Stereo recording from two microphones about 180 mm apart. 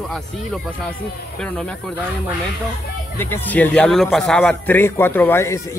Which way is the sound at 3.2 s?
10° left (ahead or behind).